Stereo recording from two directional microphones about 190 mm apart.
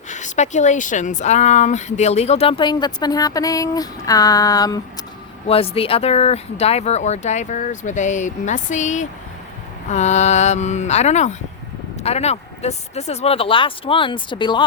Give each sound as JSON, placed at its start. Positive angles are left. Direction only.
{"t": 0.1, "sound": "speech", "side_deg": 40}
{"t": 5.5, "sound": "speech", "side_deg": 30}